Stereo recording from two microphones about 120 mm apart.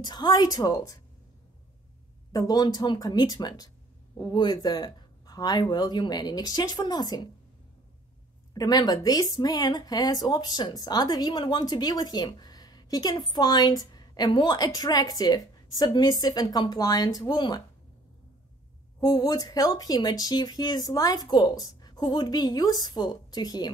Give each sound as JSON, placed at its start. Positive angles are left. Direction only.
{"t": 0.0, "sound": "a woman's voice", "side_deg": 35}
{"t": 2.3, "sound": "a woman's voice", "side_deg": 30}
{"t": 8.5, "sound": "a woman's voice", "side_deg": 35}
{"t": 18.9, "sound": "a woman's voice", "side_deg": 35}